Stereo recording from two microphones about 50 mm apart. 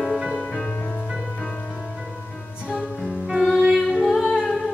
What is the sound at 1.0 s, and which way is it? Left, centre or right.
Music, centre.